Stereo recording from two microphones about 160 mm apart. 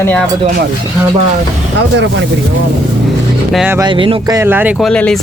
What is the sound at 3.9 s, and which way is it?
Speech, 35° right (ahead or behind).